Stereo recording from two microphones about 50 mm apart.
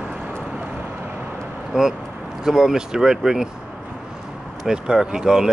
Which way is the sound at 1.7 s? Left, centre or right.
Centre.